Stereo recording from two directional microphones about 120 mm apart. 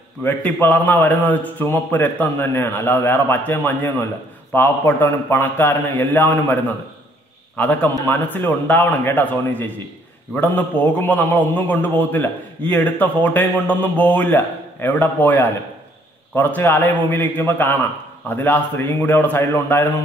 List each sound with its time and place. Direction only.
0.2 s a man's voice: 15° left (ahead or behind)